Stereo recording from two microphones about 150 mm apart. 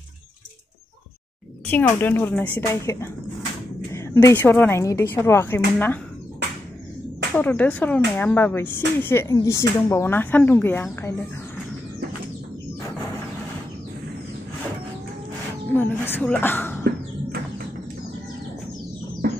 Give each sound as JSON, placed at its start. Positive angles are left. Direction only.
{"t": 1.7, "sound": "speech", "side_deg": 10}
{"t": 3.9, "sound": "a sound", "side_deg": 20}
{"t": 4.6, "sound": "speech", "side_deg": 15}
{"t": 7.3, "sound": "speech", "side_deg": 10}
{"t": 15.7, "sound": "speech", "side_deg": 10}